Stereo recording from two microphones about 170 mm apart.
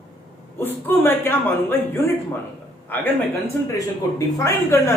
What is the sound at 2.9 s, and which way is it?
Speech, 10° left (ahead or behind).